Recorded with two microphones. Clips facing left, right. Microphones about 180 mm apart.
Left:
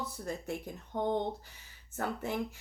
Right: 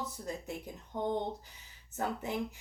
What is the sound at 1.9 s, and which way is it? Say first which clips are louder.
Speech: even; 20° right (ahead or behind).